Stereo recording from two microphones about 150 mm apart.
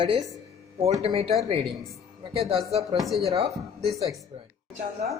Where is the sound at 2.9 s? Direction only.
Centre (ahead or behind).